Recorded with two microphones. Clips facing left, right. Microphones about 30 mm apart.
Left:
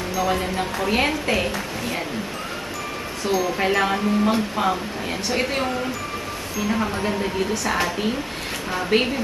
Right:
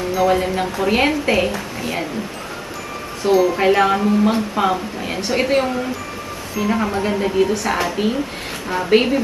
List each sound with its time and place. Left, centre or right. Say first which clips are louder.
0.3 s a woman's voice: right 5 dB; centre
3.3 s speech: right 8 dB; right
3.5 s a woman's voice: right 6 dB; centre
6.7 s a woman's voice: right 4 dB; centre